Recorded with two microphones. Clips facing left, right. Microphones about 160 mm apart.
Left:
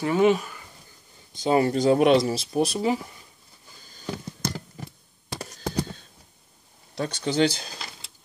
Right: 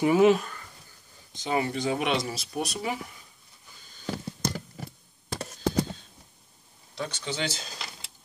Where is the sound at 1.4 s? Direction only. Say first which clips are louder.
Left 7 dB; 35° left (ahead or behind).